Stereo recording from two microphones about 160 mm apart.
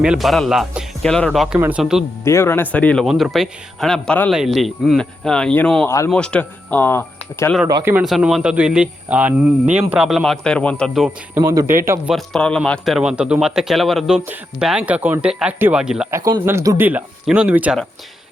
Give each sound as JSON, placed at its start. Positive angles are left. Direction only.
{"t": 0.0, "sound": "speech", "side_deg": -5}
{"t": 1.5, "sound": "speech", "side_deg": -10}
{"t": 2.2, "sound": "speech", "side_deg": 15}
{"t": 8.0, "sound": "speech", "side_deg": 0}
{"t": 11.3, "sound": "speech", "side_deg": -20}
{"t": 12.1, "sound": "speech", "side_deg": 5}
{"t": 16.1, "sound": "speech", "side_deg": -20}